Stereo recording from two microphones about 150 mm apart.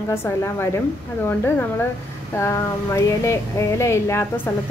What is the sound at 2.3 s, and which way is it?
A woman's voice, 20° left (ahead or behind).